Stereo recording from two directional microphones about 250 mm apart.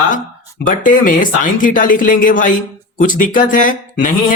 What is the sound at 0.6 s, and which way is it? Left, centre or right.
Speech, left.